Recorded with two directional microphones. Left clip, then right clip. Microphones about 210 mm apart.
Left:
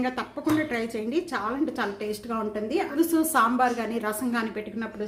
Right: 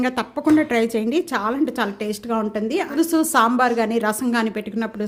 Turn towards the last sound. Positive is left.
turn(degrees=-50)  # may be behind; listen again after turning